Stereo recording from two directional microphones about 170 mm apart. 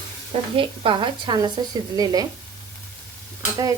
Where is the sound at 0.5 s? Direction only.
30° right (ahead or behind).